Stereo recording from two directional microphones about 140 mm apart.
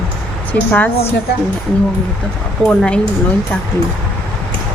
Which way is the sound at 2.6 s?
5° left (ahead or behind).